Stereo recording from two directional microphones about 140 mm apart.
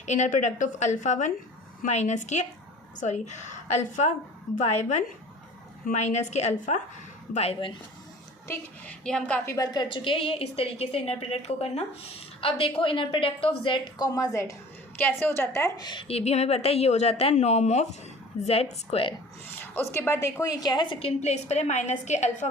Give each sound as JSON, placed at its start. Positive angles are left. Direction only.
{"t": 0.0, "sound": "a woman's voice", "side_deg": 55}
{"t": 8.4, "sound": "a woman's voice", "side_deg": 5}
{"t": 9.5, "sound": "speech", "side_deg": 25}
{"t": 9.9, "sound": "a woman's voice", "side_deg": 40}
{"t": 15.9, "sound": "speech", "side_deg": 40}
{"t": 19.5, "sound": "speech", "side_deg": 15}
{"t": 21.2, "sound": "a woman's voice", "side_deg": 50}